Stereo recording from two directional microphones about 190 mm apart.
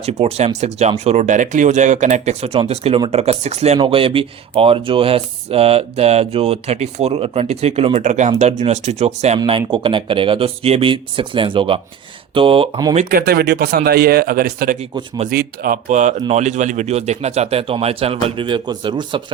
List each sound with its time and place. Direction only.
0.0 s speech: 35° right (ahead or behind)
13.1 s a man's voice: 50° right (ahead or behind); by 19.2 s 25° right (ahead or behind)